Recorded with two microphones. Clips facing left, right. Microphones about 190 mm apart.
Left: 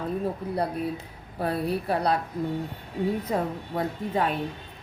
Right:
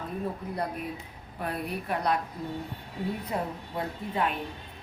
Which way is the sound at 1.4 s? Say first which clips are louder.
Left 6 dB; 30° left (ahead or behind).